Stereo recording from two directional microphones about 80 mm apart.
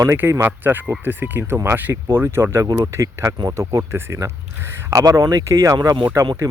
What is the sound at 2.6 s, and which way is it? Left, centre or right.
Speech, right.